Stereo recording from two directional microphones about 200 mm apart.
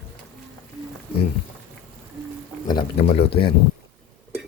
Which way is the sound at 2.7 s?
20° left (ahead or behind).